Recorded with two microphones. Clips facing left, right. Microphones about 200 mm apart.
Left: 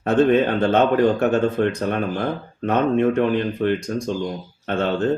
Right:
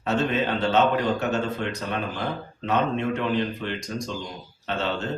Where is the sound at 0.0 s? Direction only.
55° left (ahead or behind).